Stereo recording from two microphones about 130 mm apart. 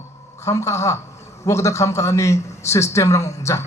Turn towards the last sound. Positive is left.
turn(degrees=20)  # may be behind; listen again after turning